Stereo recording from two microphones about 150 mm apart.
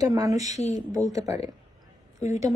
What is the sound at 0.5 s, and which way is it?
Speech, 50° left (ahead or behind).